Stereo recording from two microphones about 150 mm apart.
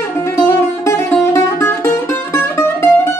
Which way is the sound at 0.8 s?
15° left (ahead or behind).